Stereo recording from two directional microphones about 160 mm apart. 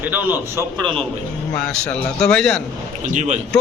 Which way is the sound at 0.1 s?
10° right (ahead or behind).